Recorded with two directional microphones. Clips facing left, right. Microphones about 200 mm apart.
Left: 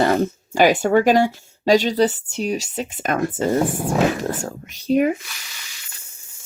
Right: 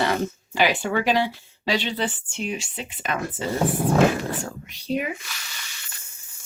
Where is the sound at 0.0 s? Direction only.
45° left (ahead or behind).